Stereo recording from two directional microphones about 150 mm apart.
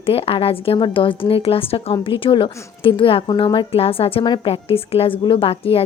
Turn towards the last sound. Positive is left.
turn(degrees=40)  # may be behind; listen again after turning